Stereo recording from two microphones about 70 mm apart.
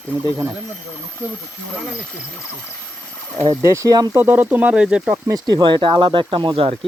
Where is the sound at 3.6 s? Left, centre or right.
Right.